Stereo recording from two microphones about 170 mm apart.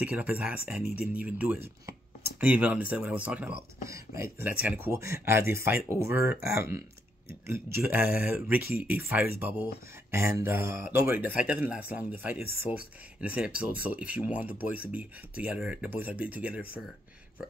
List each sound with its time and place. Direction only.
0.0 s speech: 10° right (ahead or behind)